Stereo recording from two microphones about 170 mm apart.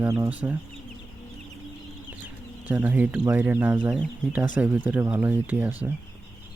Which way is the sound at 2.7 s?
10° right (ahead or behind).